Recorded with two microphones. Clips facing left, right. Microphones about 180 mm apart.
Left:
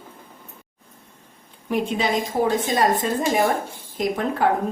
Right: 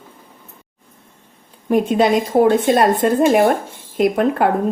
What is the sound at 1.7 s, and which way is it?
Speech, 50° right (ahead or behind).